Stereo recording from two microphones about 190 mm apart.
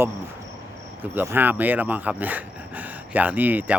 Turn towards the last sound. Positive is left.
turn(degrees=-10)  # may be behind; listen again after turning